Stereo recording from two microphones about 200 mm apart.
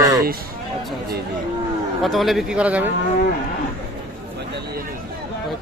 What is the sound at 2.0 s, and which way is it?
Speech, centre (ahead or behind).